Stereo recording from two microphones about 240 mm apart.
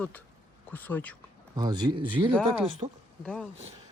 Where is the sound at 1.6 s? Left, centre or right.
Centre.